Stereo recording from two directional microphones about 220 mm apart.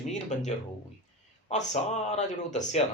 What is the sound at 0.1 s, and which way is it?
Speech, 30° left (ahead or behind).